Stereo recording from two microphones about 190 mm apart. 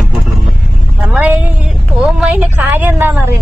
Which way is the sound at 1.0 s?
5° right (ahead or behind).